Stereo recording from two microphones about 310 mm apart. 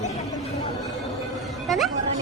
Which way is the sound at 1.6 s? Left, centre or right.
Centre.